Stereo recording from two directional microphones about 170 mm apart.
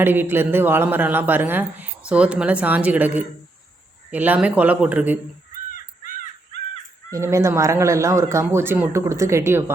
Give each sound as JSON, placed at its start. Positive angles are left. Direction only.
{"t": 0.0, "sound": "a woman's voice", "side_deg": -10}
{"t": 5.7, "sound": "crow", "side_deg": 55}
{"t": 7.1, "sound": "a woman's voice", "side_deg": -15}